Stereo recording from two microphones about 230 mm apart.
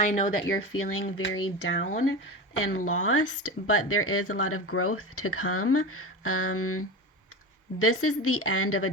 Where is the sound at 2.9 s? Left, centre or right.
Left.